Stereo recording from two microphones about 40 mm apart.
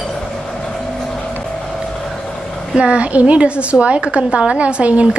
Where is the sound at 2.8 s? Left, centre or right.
Right.